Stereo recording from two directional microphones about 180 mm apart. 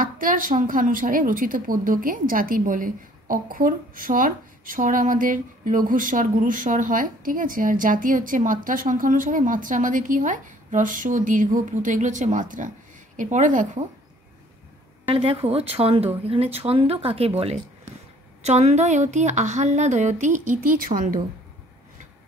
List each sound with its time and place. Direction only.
0.0 s speech: 50° right (ahead or behind)
15.0 s a woman's voice: 30° right (ahead or behind); by 21.2 s 45° right (ahead or behind)